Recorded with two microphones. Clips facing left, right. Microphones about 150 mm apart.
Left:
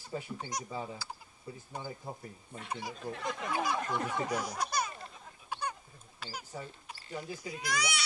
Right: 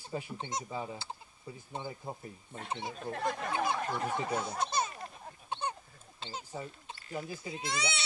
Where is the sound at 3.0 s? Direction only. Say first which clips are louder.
Right 6 dB; 50° right (ahead or behind).